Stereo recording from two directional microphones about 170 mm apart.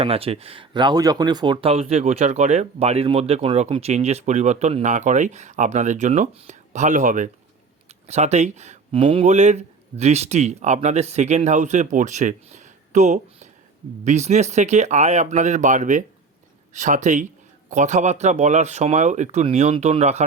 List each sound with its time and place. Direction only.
0.0 s speech: 35° right (ahead or behind)